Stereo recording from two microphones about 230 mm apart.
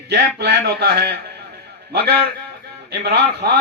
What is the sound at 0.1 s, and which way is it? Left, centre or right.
A man's voice, right.